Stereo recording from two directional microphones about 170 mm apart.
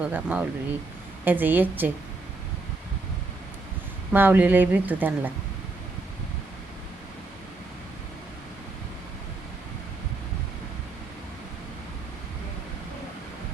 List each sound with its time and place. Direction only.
0.0 s speech: 10° right (ahead or behind)
4.1 s speech: 10° right (ahead or behind)